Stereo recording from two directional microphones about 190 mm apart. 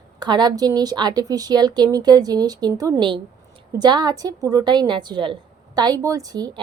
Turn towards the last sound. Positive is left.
turn(degrees=-20)  # may be behind; listen again after turning